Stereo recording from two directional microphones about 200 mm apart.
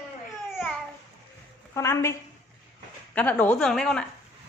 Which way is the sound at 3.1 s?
5° left (ahead or behind).